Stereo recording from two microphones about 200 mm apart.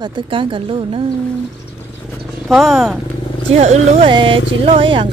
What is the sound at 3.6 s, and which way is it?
Speech, 30° right (ahead or behind).